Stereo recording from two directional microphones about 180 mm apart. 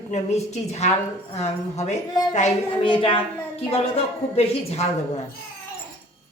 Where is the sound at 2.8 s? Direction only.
30° left (ahead or behind).